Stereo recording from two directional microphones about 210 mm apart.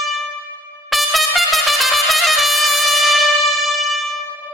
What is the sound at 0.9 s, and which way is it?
Trumpet, centre (ahead or behind).